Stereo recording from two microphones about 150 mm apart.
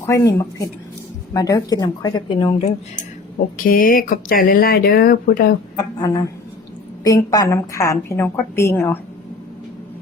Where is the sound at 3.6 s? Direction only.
70° left (ahead or behind).